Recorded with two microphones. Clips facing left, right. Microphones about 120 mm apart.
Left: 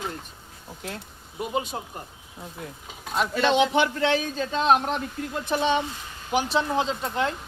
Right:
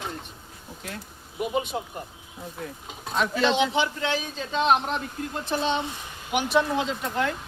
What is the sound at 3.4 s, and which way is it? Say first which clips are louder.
A man's voice: left 3 dB; 55° left (ahead or behind).